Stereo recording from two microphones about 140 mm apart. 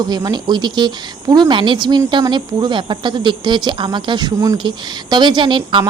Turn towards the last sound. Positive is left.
turn(degrees=-35)  # may be behind; listen again after turning